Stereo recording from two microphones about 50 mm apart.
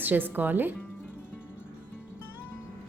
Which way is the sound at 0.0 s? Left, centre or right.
Right.